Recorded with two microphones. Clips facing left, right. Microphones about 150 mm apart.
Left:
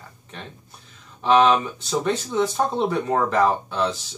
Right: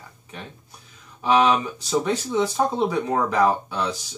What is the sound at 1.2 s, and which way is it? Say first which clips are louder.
Speech: left 2 dB; 5° right (ahead or behind).